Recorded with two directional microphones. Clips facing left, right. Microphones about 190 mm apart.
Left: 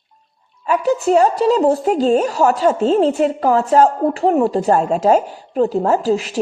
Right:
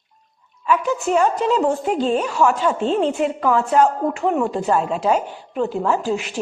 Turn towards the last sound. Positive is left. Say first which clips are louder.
# left 5 dB
turn(degrees=35)  # may be behind; listen again after turning